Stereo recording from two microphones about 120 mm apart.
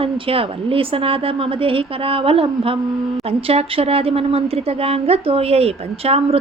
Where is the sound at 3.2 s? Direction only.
55° right (ahead or behind).